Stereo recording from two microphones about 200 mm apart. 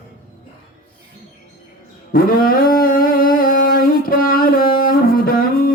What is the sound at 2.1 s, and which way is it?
Music, 45° left (ahead or behind).